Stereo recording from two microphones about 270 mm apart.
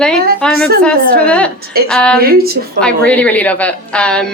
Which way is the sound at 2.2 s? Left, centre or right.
Right.